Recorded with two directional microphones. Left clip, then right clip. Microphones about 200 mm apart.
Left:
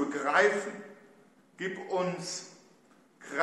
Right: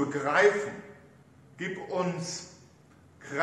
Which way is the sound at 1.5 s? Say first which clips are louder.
Even; 15° left (ahead or behind).